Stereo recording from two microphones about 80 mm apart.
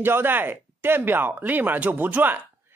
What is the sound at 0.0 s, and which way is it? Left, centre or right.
A man's voice, right.